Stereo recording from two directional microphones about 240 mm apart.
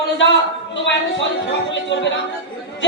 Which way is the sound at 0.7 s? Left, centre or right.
Left.